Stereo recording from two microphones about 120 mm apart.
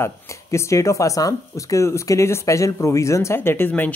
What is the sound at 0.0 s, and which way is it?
Speech, 25° left (ahead or behind).